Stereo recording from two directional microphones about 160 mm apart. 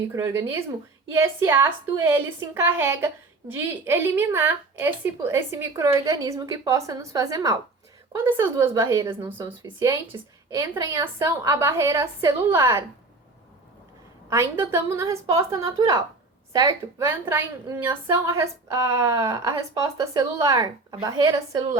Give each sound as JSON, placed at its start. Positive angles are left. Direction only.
{"t": 0.1, "sound": "a woman's voice", "side_deg": -15}
{"t": 14.3, "sound": "a woman's voice", "side_deg": -15}